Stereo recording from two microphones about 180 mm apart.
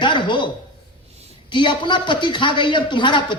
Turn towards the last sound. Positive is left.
turn(degrees=25)  # may be behind; listen again after turning